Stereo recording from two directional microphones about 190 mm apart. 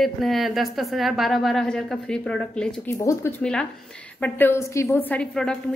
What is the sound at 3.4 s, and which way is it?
A woman's voice, 5° left (ahead or behind).